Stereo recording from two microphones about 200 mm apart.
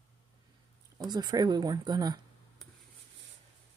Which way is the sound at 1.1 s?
20° right (ahead or behind).